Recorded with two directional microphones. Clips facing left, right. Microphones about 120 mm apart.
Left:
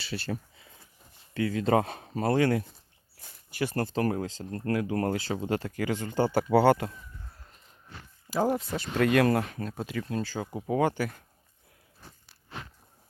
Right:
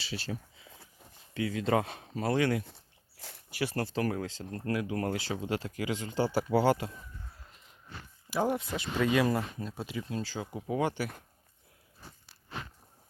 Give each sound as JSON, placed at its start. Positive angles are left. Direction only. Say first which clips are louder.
{"t": 0.0, "sound": "speech", "louder": "left 4 dB", "side_deg": 55}
{"t": 1.3, "sound": "speech", "louder": "left 4 dB", "side_deg": 45}
{"t": 2.6, "sound": "a sound", "louder": "right 2 dB", "side_deg": -80}
{"t": 3.5, "sound": "speech", "louder": "left 3 dB", "side_deg": 50}
{"t": 8.3, "sound": "speech", "louder": "left 3 dB", "side_deg": 35}
{"t": 9.0, "sound": "speech", "louder": "left 4 dB", "side_deg": 65}
{"t": 9.7, "sound": "speech", "louder": "left 4 dB", "side_deg": 50}